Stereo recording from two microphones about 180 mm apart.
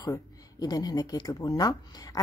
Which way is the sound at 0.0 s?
20° left (ahead or behind).